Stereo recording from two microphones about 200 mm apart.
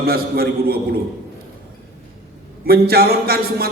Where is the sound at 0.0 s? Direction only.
50° right (ahead or behind).